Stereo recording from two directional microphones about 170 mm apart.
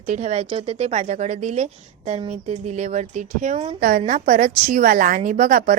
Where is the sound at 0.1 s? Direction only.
45° right (ahead or behind).